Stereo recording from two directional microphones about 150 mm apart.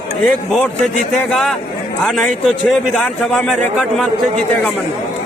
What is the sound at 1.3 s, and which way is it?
A man's voice, 5° left (ahead or behind).